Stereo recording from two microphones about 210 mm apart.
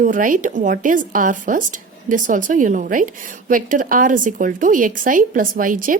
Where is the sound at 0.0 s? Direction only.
40° right (ahead or behind).